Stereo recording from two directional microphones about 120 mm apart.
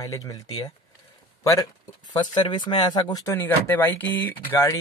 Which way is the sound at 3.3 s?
15° left (ahead or behind).